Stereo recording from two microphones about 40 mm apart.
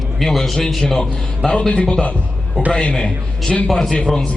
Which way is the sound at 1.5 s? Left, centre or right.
Left.